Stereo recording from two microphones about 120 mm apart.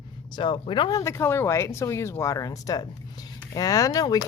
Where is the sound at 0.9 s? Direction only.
25° left (ahead or behind).